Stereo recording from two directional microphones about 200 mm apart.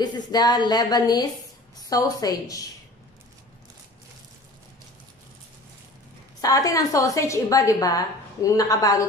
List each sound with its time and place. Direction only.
0.0 s a woman's voice: 20° left (ahead or behind)
6.4 s a woman's voice: 15° left (ahead or behind)